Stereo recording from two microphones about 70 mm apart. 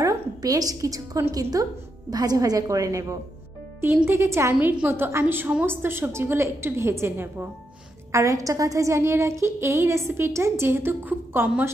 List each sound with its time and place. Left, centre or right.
0.0 s a woman's voice: right
4.8 s a woman's voice: right
8.1 s a woman's voice: right